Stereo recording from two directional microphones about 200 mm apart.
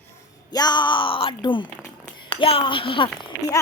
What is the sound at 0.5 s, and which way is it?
Speech, 20° left (ahead or behind).